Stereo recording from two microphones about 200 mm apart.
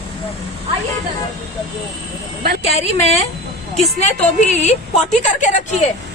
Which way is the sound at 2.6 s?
30° left (ahead or behind).